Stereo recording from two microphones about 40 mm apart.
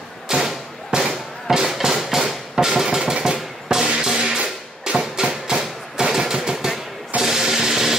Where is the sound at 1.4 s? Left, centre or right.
Centre.